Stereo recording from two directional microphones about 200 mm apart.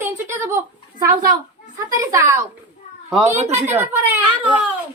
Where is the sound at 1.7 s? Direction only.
15° right (ahead or behind).